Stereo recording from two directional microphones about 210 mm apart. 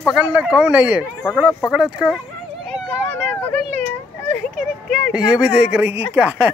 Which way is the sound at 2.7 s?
5° left (ahead or behind).